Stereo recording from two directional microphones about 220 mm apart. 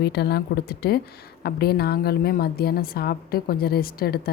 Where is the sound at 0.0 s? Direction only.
45° left (ahead or behind).